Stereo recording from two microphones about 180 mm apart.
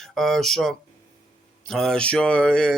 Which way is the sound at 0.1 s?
Centre (ahead or behind).